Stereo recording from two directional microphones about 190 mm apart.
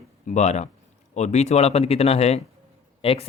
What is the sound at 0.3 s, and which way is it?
Speech, 35° left (ahead or behind).